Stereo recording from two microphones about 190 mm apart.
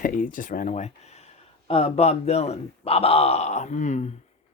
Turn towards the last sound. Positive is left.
turn(degrees=40)  # may be behind; listen again after turning